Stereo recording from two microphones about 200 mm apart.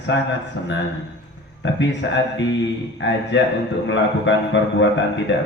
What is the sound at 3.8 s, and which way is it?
A man's voice, 65° left (ahead or behind).